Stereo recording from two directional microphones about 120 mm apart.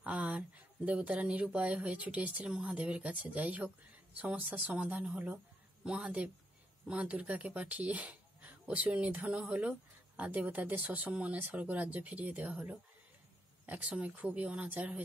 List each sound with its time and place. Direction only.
0.0 s speech: 10° right (ahead or behind)